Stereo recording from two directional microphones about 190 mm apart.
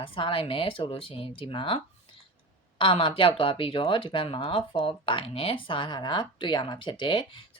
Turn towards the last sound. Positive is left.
turn(degrees=25)  # may be behind; listen again after turning